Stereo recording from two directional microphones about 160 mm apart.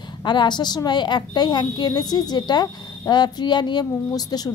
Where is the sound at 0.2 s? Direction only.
25° left (ahead or behind).